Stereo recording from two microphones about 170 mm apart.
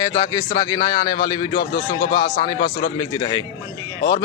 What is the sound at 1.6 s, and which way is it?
Speech, 60° left (ahead or behind).